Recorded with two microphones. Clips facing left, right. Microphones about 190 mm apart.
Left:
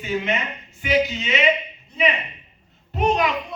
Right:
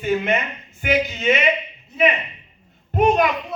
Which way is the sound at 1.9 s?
Centre (ahead or behind).